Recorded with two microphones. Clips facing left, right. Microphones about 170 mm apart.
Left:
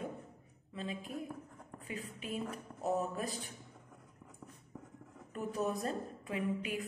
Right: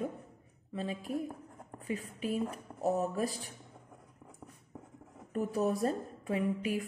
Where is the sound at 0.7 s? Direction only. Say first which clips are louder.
Right 5 dB; 40° right (ahead or behind).